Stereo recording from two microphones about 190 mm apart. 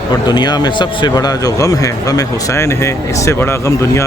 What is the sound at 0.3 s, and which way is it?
A man's voice, 20° left (ahead or behind).